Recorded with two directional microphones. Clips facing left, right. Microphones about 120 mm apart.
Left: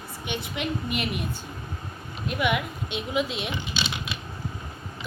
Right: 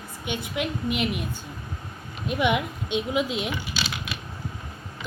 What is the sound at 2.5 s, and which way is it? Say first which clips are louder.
A woman's voice: right 3 dB; 20° right (ahead or behind).